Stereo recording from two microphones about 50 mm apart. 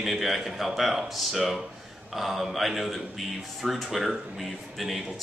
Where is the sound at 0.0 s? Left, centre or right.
Centre.